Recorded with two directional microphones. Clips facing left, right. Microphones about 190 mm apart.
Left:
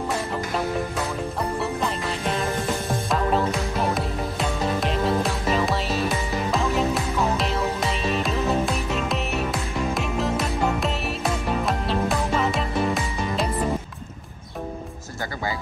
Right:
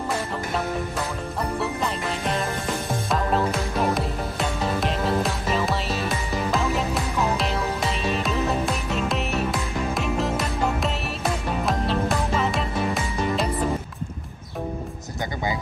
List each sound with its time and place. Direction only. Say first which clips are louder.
1.6 s music: even; centre (ahead or behind)